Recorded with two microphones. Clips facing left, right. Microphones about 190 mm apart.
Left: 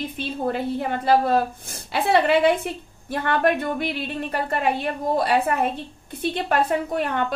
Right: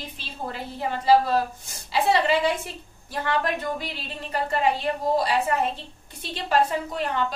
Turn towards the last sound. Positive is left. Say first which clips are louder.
# left 3 dB
turn(degrees=55)  # may be behind; listen again after turning